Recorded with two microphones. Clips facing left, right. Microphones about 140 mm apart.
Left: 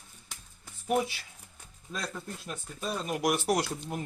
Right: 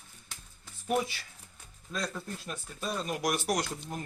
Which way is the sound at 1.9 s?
5° left (ahead or behind).